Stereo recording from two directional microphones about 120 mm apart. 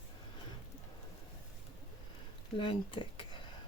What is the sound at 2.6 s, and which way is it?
Speech, 45° left (ahead or behind).